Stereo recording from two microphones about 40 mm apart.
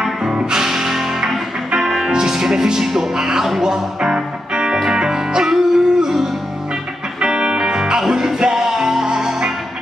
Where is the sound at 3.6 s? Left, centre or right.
Centre.